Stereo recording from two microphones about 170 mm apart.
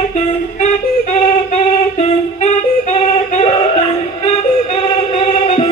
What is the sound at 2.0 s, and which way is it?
Yodeling, 45° left (ahead or behind).